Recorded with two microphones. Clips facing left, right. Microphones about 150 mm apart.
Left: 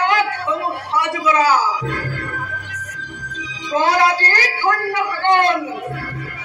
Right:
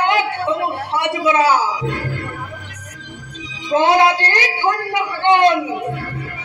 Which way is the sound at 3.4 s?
25° right (ahead or behind).